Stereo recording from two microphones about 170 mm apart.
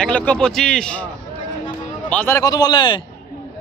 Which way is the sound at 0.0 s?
5° left (ahead or behind).